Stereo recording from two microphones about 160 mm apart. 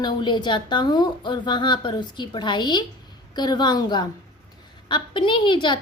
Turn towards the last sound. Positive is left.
turn(degrees=30)  # may be behind; listen again after turning